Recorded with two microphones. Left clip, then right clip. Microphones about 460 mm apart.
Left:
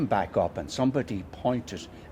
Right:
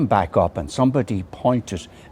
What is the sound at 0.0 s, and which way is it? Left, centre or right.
A man's voice, right.